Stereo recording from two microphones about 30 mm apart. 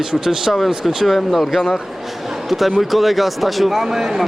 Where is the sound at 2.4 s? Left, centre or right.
Centre.